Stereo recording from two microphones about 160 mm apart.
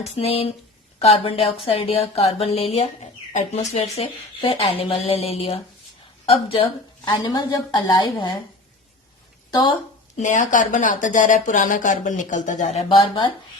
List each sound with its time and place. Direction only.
0.0 s a woman's voice: 40° left (ahead or behind)
9.5 s speech: 25° left (ahead or behind)
10.2 s speech: 50° left (ahead or behind)
12.9 s a woman's voice: 30° left (ahead or behind)